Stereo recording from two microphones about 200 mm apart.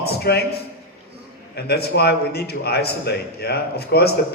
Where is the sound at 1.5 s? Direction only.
55° left (ahead or behind).